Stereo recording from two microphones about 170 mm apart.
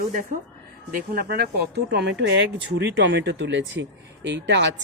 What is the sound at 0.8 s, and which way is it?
A woman's voice, 65° right (ahead or behind).